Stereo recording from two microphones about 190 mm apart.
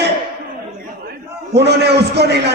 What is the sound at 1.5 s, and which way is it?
Speech, 60° right (ahead or behind).